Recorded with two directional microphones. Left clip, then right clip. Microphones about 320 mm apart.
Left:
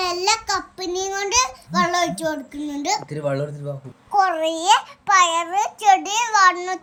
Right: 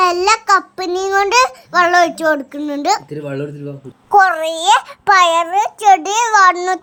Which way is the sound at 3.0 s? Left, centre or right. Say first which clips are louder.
Even; left.